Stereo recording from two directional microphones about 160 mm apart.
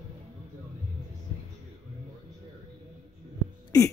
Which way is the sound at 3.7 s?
25° left (ahead or behind).